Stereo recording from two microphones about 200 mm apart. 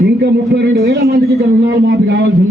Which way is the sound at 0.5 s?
55° right (ahead or behind).